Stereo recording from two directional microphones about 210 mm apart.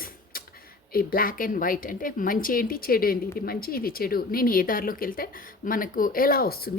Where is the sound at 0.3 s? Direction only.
45° left (ahead or behind).